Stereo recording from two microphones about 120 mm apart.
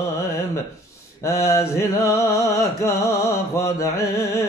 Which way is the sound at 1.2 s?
25° left (ahead or behind).